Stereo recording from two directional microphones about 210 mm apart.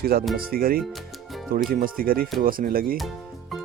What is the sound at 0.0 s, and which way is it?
Speech, 45° right (ahead or behind).